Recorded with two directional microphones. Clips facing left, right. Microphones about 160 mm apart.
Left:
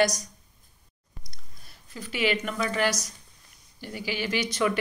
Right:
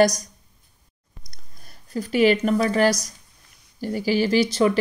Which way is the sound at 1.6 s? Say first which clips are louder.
Right 12 dB; 45° right (ahead or behind).